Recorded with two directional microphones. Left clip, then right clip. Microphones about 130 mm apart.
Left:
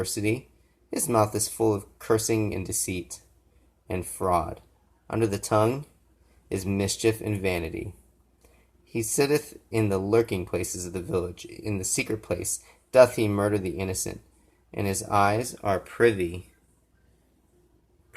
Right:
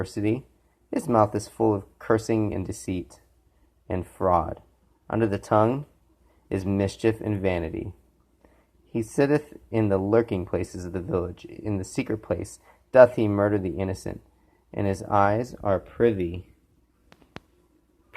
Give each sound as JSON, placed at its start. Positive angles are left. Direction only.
{"t": 0.0, "sound": "speech", "side_deg": -15}
{"t": 0.9, "sound": "a sound", "side_deg": -15}
{"t": 1.1, "sound": "speech", "side_deg": -15}
{"t": 9.2, "sound": "speech", "side_deg": -20}